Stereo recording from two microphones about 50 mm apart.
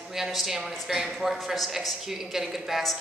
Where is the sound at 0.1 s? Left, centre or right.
Centre.